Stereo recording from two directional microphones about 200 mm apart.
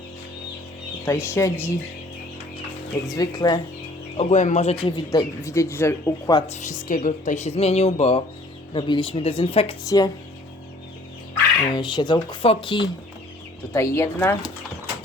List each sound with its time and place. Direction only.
1.0 s speech: 15° left (ahead or behind)
3.2 s speech: 20° left (ahead or behind)
4.2 s speech: 35° left (ahead or behind); by 6.4 s 15° left (ahead or behind)
6.5 s speech: 35° left (ahead or behind)
9.8 s speech: 15° left (ahead or behind)
11.7 s speech: 20° left (ahead or behind)
13.7 s speech: 15° left (ahead or behind)